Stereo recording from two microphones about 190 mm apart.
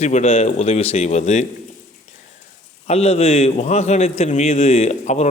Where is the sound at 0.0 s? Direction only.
35° left (ahead or behind).